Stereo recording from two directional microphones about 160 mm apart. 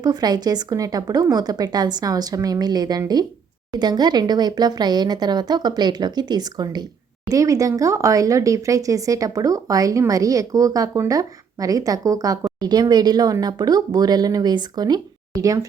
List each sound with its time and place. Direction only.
0.0 s speech: 25° right (ahead or behind)